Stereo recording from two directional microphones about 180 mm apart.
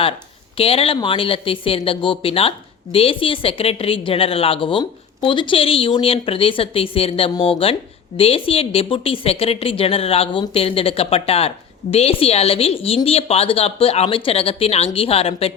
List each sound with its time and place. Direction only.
0.5 s speech: 30° left (ahead or behind)